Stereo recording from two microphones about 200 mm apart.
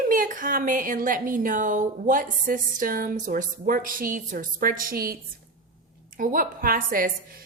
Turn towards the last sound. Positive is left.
turn(degrees=-45)  # may be behind; listen again after turning